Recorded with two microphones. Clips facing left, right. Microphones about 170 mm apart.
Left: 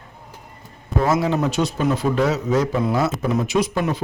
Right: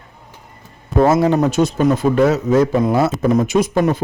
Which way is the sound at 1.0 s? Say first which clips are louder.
Right 6 dB; 50° right (ahead or behind).